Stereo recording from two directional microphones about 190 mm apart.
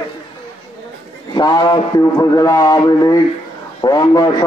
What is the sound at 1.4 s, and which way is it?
A man's voice, 20° left (ahead or behind).